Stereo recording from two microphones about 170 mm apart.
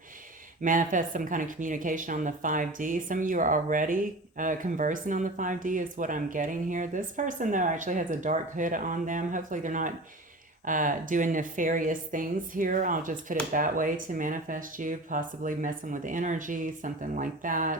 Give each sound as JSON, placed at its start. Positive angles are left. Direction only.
{"t": 0.6, "sound": "speech", "side_deg": -50}